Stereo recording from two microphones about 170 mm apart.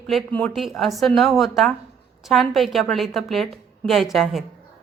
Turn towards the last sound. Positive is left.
turn(degrees=0)  # may be behind; listen again after turning